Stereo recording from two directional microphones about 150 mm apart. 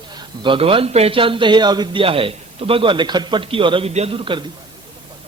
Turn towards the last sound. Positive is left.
turn(degrees=-35)  # may be behind; listen again after turning